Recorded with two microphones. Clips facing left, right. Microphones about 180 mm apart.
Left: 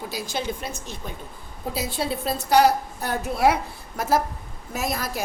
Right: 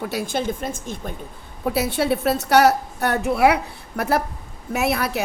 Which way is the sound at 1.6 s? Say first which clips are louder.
Right 7 dB; 65° right (ahead or behind).